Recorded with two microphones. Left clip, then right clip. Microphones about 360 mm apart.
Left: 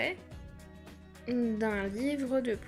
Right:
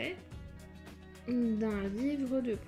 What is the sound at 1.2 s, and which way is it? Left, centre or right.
Speech, centre.